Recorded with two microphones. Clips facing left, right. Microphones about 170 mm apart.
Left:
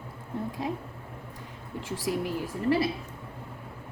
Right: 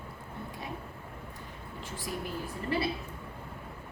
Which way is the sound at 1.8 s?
90° left.